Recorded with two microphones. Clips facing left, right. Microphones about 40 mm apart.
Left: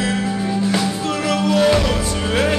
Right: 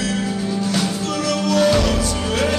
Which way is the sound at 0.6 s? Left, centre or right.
Left.